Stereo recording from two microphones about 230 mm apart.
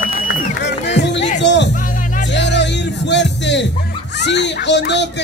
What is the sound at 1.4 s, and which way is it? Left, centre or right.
Music, left.